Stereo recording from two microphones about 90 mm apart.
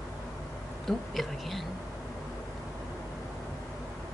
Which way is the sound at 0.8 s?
Centre (ahead or behind).